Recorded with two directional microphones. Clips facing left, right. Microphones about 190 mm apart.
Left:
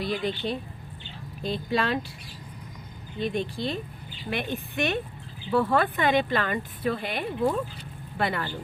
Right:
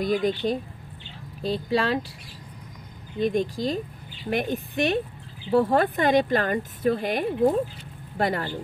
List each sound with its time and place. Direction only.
0.0 s speech: 45° right (ahead or behind)
1.4 s speech: 35° right (ahead or behind)
3.2 s speech: 45° right (ahead or behind)